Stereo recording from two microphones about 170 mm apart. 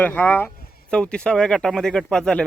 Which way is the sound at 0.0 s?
10° left (ahead or behind).